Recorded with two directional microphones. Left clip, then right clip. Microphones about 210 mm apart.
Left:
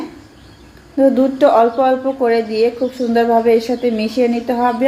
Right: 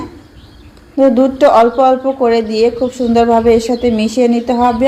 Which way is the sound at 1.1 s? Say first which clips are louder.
Right 4 dB; 25° right (ahead or behind).